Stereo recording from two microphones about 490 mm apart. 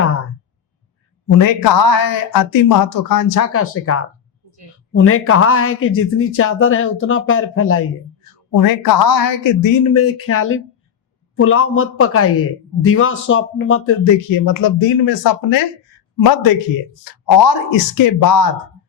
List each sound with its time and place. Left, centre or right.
1.3 s a man's voice: left
8.4 s a man's voice: left